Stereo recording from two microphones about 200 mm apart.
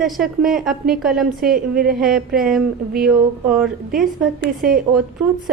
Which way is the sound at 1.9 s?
5° right (ahead or behind).